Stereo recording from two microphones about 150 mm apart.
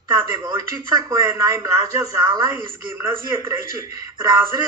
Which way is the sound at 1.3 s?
25° right (ahead or behind).